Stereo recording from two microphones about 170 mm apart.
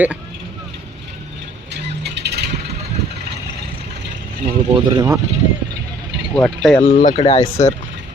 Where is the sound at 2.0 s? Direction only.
80° right.